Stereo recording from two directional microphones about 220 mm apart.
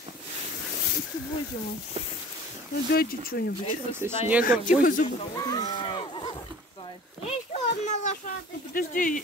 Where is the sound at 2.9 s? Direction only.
45° left (ahead or behind).